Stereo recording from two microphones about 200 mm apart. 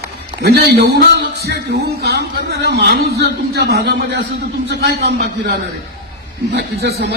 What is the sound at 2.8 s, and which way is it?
A man's voice, 55° right (ahead or behind).